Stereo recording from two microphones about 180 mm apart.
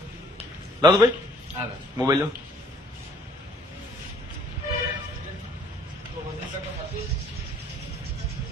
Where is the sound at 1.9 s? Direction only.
15° right (ahead or behind).